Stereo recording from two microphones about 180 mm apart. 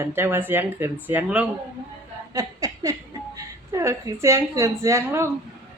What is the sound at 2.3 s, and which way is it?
Speech, 20° right (ahead or behind).